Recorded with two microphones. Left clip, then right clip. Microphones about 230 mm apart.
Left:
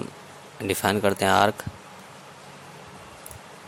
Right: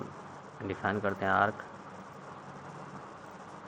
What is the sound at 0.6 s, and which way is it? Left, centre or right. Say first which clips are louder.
Speech: left 9 dB; left.